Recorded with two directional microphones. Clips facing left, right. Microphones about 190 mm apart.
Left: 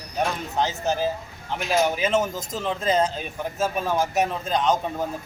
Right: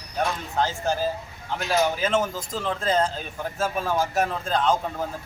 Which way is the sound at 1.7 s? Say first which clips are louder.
Left 1 dB; 10° left (ahead or behind).